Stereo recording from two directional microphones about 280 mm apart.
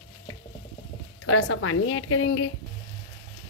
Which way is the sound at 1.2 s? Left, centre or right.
Left.